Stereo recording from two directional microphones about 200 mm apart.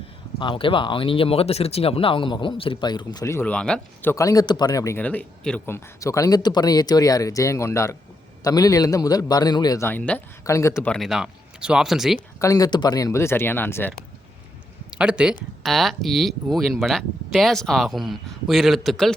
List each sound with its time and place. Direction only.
0.3 s speech: 25° left (ahead or behind)
10.9 s speech: centre (ahead or behind)
12.4 s speech: 15° left (ahead or behind)
14.8 s speech: 5° right (ahead or behind)